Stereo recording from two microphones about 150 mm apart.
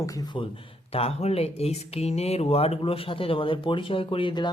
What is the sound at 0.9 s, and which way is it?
Speech, 45° left (ahead or behind).